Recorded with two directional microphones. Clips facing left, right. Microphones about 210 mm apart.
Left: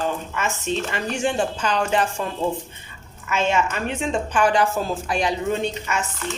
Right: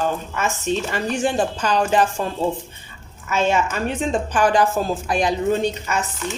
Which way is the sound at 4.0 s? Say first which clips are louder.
Right 1 dB; 35° right (ahead or behind).